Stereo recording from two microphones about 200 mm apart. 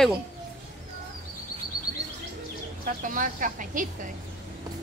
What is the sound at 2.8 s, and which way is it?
Speech, 40° right (ahead or behind).